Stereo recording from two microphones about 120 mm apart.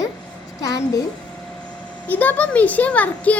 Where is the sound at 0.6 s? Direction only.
30° left (ahead or behind).